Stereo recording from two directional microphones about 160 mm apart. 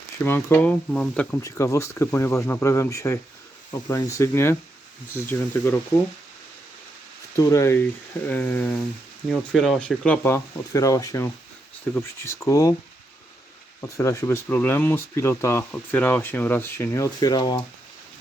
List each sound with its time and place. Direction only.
0.2 s speech: 15° left (ahead or behind)
1.4 s speech: 20° left (ahead or behind)
7.3 s speech: 20° left (ahead or behind)
9.3 s speech: 5° left (ahead or behind); by 12.7 s 20° left (ahead or behind)
13.8 s speech: 20° left (ahead or behind)